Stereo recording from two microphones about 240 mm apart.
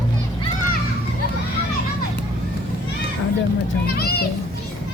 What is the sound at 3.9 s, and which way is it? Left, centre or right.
Speech, left.